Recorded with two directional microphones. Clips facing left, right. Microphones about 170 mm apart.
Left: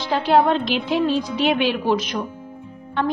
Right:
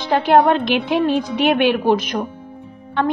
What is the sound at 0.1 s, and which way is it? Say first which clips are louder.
A woman's voice: right 3 dB; 55° right (ahead or behind).